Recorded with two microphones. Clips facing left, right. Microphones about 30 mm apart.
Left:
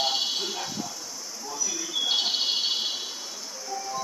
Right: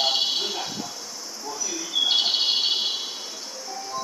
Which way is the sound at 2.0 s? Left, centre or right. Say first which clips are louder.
Right 4 dB; right.